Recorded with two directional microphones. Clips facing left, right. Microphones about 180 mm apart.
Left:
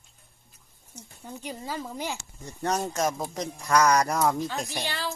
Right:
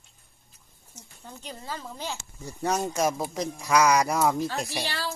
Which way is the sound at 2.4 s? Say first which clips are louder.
Right 1 dB; 5° right (ahead or behind).